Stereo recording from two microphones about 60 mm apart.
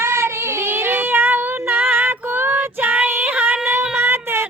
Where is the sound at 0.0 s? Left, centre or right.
Right.